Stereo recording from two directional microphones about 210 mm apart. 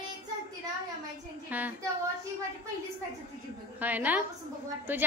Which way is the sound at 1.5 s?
10° right (ahead or behind).